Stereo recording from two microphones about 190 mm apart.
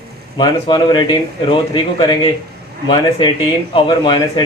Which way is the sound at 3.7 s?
25° left (ahead or behind).